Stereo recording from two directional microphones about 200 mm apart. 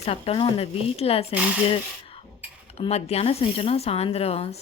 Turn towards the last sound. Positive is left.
turn(degrees=30)  # may be behind; listen again after turning